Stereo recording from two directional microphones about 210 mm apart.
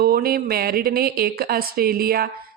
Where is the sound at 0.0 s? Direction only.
45° right (ahead or behind).